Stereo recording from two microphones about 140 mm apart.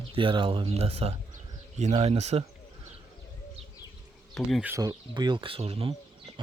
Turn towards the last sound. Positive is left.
turn(degrees=-35)  # may be behind; listen again after turning